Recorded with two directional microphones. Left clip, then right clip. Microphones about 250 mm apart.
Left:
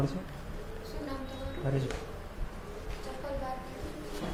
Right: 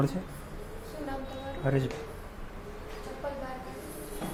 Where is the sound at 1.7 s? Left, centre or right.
Right.